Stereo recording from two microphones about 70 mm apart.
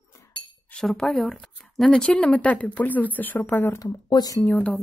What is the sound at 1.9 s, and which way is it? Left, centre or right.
Speech, centre.